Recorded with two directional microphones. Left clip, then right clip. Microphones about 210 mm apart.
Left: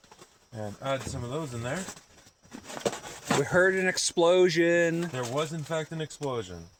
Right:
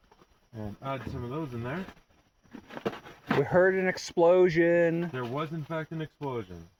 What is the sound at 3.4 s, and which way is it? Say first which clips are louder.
Speech: even; 5° right (ahead or behind).